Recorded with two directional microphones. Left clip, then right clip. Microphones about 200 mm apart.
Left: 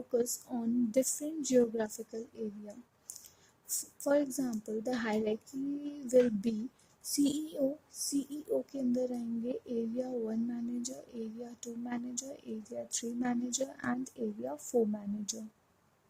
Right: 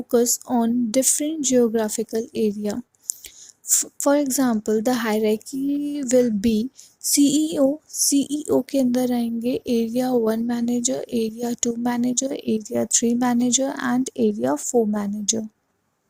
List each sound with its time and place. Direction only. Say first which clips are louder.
0.1 s a woman's voice: right 14 dB; 35° right (ahead or behind)
3.8 s a woman's voice: right 11 dB; 35° right (ahead or behind)